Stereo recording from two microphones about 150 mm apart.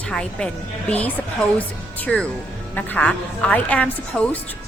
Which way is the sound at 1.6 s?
10° left (ahead or behind).